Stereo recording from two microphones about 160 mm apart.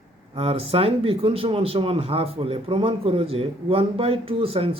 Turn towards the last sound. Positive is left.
turn(degrees=-35)  # may be behind; listen again after turning